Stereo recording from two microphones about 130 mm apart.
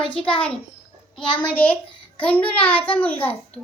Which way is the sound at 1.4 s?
10° left (ahead or behind).